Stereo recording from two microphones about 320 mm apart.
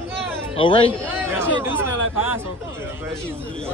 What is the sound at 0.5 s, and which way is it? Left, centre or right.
Speech, centre.